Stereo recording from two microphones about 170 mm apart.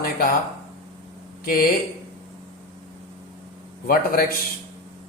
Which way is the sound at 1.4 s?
60° left (ahead or behind).